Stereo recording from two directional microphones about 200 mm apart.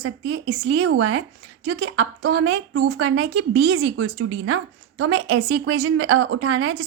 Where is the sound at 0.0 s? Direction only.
70° right (ahead or behind).